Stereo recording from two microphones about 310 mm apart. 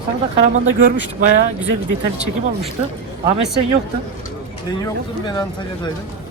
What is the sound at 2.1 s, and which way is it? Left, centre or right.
Speech, centre.